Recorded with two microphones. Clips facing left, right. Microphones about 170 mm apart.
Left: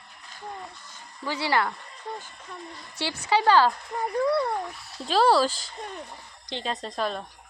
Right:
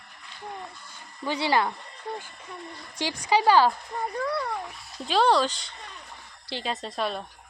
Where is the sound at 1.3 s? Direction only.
20° right (ahead or behind).